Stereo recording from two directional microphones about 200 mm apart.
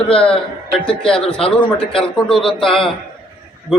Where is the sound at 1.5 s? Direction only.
5° left (ahead or behind).